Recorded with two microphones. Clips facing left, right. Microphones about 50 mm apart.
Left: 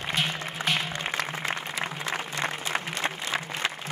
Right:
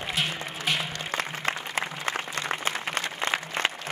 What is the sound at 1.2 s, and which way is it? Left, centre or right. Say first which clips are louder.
Applause: right 3 dB; right.